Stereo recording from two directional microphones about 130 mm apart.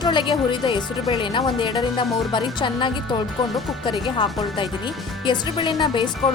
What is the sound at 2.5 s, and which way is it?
Speech, 35° left (ahead or behind).